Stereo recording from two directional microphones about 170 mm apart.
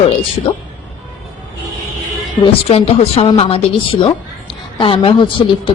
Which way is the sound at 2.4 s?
35° left (ahead or behind).